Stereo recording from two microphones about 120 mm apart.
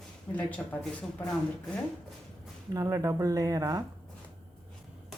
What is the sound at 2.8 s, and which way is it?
Speech, 30° right (ahead or behind).